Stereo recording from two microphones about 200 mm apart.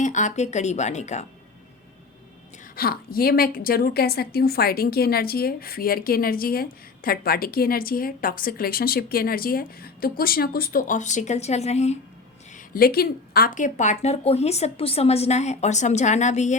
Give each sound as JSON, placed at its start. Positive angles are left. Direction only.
{"t": 0.0, "sound": "a woman's voice", "side_deg": 35}
{"t": 2.7, "sound": "a woman's voice", "side_deg": 50}
{"t": 12.5, "sound": "a woman's voice", "side_deg": 45}